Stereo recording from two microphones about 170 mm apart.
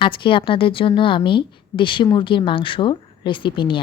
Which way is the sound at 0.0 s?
30° left (ahead or behind).